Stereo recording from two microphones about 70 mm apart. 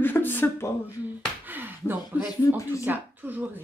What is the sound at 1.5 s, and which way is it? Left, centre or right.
Speech, right.